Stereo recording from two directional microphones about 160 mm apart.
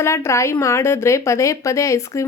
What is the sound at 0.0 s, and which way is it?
A woman's voice, 15° left (ahead or behind).